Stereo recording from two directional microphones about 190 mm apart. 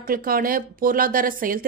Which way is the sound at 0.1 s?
50° right (ahead or behind).